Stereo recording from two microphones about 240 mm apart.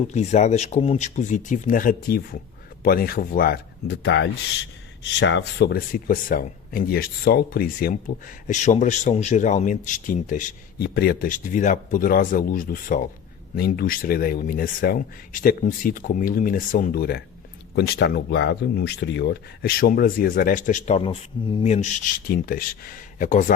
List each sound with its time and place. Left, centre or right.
0.1 s speech: left